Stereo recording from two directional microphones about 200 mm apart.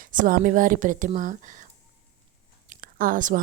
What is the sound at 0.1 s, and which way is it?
Speech, 45° right (ahead or behind).